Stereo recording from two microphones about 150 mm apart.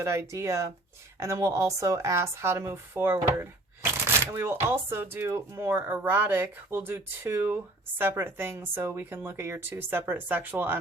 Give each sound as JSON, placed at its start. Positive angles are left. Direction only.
{"t": 0.0, "sound": "speech", "side_deg": -20}